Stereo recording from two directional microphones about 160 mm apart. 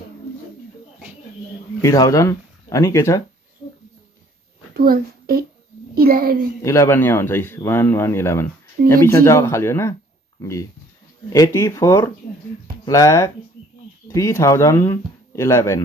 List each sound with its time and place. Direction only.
1.8 s speech: 20° left (ahead or behind)
4.7 s a child's voice: 70° right (ahead or behind)
6.6 s speech: 15° left (ahead or behind)